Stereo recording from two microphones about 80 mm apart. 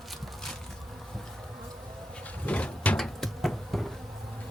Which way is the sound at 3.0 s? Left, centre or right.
Centre.